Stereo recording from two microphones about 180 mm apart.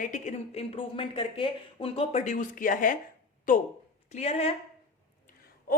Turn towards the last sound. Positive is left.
turn(degrees=35)  # may be behind; listen again after turning